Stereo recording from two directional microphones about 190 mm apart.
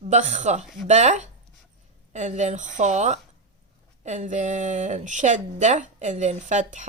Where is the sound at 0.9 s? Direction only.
40° right (ahead or behind).